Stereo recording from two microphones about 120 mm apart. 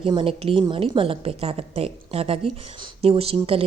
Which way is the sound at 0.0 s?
45° right (ahead or behind).